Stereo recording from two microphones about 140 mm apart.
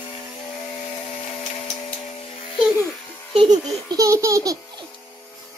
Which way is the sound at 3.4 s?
25° right (ahead or behind).